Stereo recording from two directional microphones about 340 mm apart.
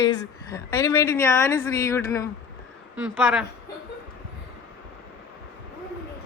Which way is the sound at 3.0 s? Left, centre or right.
Centre.